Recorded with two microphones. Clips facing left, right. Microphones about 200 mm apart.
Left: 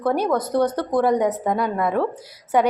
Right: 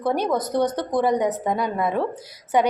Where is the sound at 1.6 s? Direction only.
15° right (ahead or behind).